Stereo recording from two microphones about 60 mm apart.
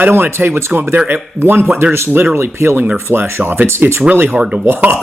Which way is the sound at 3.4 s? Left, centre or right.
Right.